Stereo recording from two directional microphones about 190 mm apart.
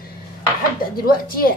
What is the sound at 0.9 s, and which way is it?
Speech, 50° left (ahead or behind).